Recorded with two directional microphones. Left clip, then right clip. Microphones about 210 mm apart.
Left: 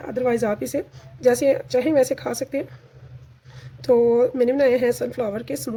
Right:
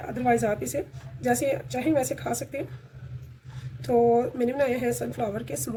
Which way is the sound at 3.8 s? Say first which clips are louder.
Left 5 dB; 50° left (ahead or behind).